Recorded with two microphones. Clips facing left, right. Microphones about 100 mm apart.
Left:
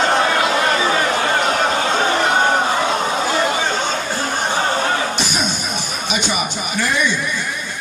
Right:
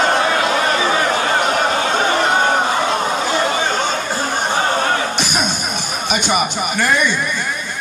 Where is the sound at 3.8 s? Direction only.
10° right (ahead or behind).